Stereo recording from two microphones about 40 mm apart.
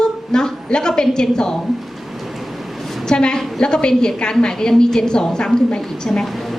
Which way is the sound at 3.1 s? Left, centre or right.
Centre.